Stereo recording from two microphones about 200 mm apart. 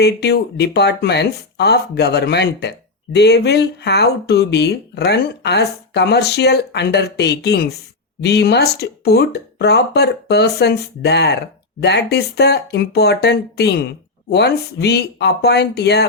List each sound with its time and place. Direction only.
0.0 s speech: 55° left (ahead or behind)